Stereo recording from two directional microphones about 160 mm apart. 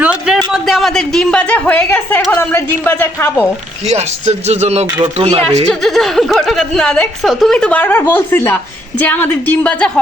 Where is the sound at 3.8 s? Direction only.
45° right (ahead or behind).